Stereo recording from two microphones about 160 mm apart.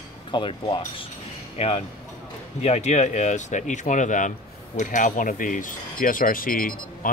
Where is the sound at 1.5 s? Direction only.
40° left (ahead or behind).